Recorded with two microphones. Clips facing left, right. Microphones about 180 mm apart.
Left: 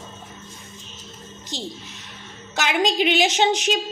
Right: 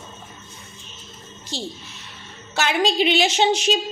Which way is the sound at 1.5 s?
20° left (ahead or behind).